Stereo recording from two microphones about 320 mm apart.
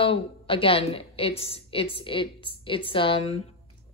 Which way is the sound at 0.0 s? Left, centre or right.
Centre.